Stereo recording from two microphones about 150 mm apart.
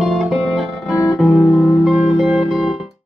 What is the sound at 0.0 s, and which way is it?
Music, centre (ahead or behind).